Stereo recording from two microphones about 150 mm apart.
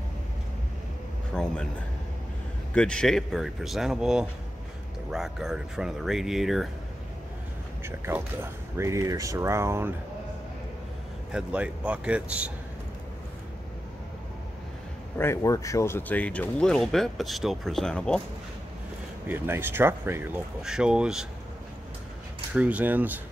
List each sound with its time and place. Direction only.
1.3 s speech: 5° left (ahead or behind)
2.7 s speech: 5° left (ahead or behind)
7.8 s speech: 15° right (ahead or behind)
11.3 s speech: 10° right (ahead or behind)
15.1 s speech: 20° left (ahead or behind)
19.2 s speech: 15° right (ahead or behind)
20.6 s speech: 5° right (ahead or behind)
22.5 s speech: 10° right (ahead or behind)